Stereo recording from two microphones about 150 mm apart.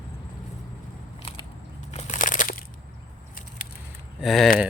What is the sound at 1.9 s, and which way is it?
Crunch, 60° left (ahead or behind).